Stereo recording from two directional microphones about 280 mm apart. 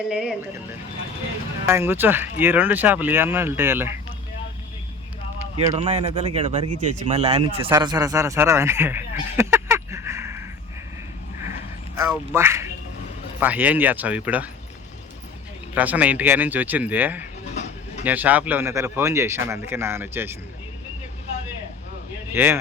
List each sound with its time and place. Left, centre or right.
0.1 s speech: centre
1.6 s speech: centre
5.6 s speech: centre
11.9 s a man's voice: centre
15.7 s speech: centre
22.3 s speech: centre